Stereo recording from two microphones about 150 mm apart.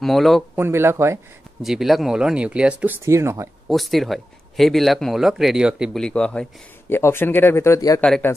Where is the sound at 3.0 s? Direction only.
20° right (ahead or behind).